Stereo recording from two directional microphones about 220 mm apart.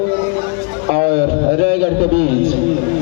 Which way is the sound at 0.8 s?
35° right (ahead or behind).